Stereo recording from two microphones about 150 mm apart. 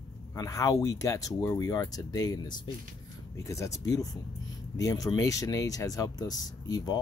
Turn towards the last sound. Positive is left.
turn(degrees=25)  # may be behind; listen again after turning